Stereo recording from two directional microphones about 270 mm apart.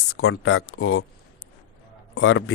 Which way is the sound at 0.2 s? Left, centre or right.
Left.